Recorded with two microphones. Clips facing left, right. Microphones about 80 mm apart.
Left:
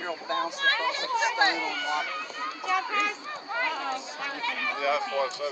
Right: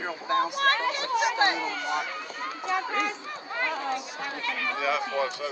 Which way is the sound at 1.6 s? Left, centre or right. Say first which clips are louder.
Even; centre.